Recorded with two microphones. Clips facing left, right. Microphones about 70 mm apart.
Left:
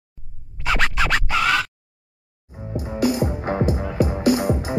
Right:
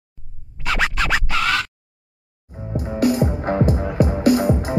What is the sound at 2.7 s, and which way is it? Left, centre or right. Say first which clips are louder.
Music: right 2 dB; right.